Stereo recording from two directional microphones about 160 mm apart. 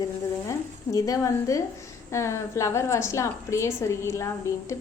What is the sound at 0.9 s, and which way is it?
A woman's voice, 20° left (ahead or behind).